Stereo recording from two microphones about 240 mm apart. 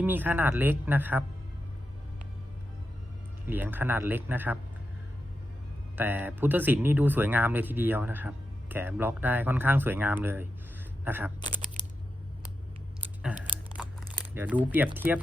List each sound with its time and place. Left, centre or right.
0.0 s speech: centre
3.4 s speech: centre
6.0 s speech: centre
11.3 s a sound: centre
13.8 s a sound: centre
14.3 s speech: centre